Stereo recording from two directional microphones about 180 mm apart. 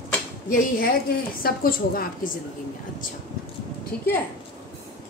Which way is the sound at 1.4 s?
55° left (ahead or behind).